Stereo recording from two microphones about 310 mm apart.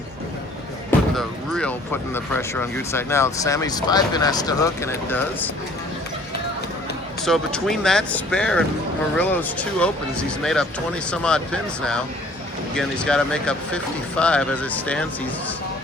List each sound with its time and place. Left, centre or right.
0.9 s speech: centre
7.2 s speech: centre